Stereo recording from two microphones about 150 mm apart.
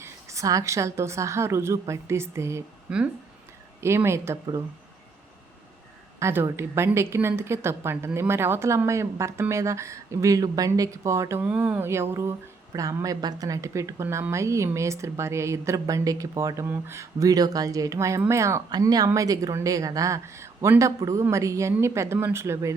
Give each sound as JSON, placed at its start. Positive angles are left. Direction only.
{"t": 0.0, "sound": "speech", "side_deg": -20}
{"t": 2.9, "sound": "speech", "side_deg": -5}
{"t": 3.8, "sound": "speech", "side_deg": -15}
{"t": 6.1, "sound": "speech", "side_deg": -20}